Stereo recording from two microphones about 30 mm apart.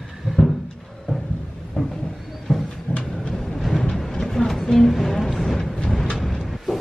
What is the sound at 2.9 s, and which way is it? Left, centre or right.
Thunder, left.